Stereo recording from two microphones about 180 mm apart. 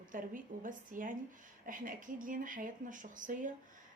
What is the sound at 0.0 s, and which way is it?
Speech, 50° right (ahead or behind).